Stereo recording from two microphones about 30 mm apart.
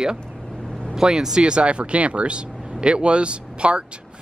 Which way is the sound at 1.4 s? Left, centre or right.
Right.